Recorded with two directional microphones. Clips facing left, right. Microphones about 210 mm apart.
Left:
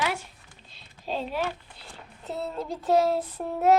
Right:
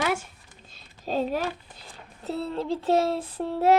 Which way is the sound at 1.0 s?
45° right (ahead or behind).